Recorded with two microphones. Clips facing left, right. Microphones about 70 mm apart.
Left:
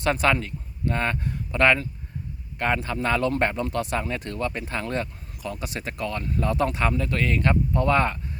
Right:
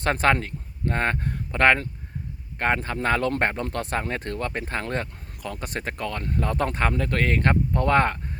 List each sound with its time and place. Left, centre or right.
0.0 s speech: right